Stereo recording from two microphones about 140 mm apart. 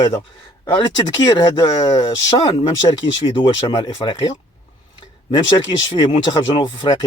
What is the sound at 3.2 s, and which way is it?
A man's voice, 35° left (ahead or behind).